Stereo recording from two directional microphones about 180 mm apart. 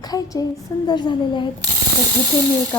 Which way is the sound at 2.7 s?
5° left (ahead or behind).